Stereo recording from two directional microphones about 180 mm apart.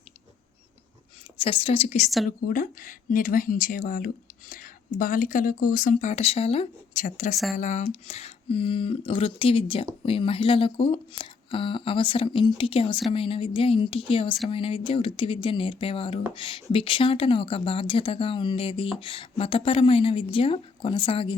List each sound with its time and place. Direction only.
1.4 s speech: 30° left (ahead or behind)
2.5 s speech: 50° left (ahead or behind); by 21.3 s 30° left (ahead or behind)